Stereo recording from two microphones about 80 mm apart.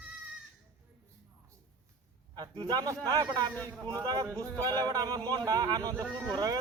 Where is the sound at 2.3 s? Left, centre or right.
Right.